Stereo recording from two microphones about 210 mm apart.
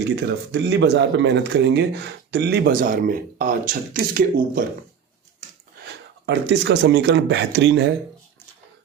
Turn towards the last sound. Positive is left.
turn(degrees=-55)  # may be behind; listen again after turning